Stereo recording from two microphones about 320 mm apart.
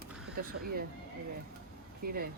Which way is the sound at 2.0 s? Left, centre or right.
Right.